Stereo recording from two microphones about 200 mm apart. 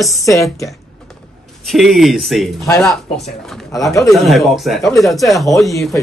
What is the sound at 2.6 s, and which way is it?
Speech, 15° left (ahead or behind).